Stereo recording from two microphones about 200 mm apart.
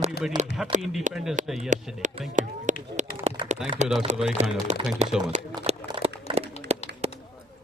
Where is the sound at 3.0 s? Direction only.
35° right (ahead or behind).